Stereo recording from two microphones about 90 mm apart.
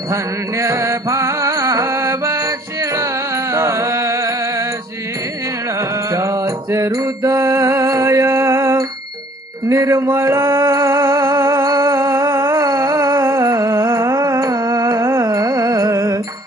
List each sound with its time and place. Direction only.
0.6 s music: 35° right (ahead or behind)
6.1 s music: 35° right (ahead or behind)
15.3 s carnatic music: 45° right (ahead or behind)